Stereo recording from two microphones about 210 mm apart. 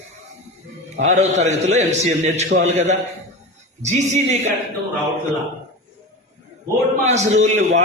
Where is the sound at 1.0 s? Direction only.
35° right (ahead or behind).